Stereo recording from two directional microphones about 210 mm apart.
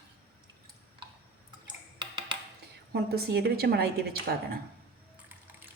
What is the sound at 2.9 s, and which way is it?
A woman's voice, 50° right (ahead or behind).